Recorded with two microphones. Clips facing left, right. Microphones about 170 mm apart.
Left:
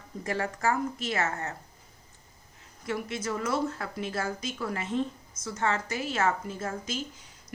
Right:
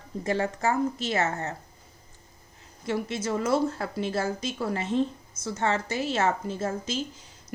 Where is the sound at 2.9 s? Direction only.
30° right (ahead or behind).